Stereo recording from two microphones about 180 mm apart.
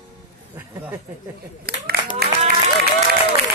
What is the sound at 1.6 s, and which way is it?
Speech, 60° right (ahead or behind).